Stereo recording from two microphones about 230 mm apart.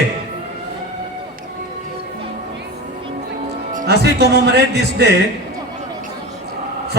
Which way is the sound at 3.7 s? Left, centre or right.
Right.